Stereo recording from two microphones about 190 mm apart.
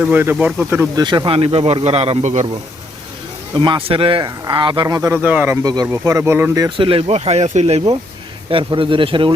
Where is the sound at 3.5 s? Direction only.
25° right (ahead or behind).